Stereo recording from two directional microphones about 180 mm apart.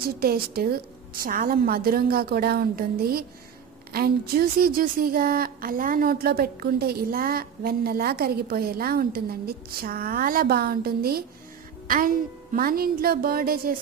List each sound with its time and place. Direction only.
0.0 s a woman's voice: 55° right (ahead or behind)